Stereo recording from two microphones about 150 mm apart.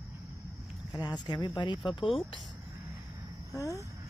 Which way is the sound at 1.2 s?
30° left (ahead or behind).